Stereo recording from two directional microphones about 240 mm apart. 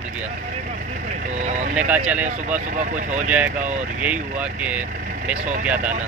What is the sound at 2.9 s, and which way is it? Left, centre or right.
Speech, right.